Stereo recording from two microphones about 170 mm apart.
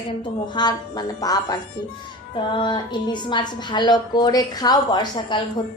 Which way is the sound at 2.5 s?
25° left (ahead or behind).